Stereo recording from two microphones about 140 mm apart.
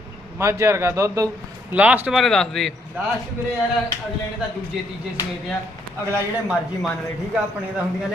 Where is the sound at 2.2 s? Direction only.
5° left (ahead or behind).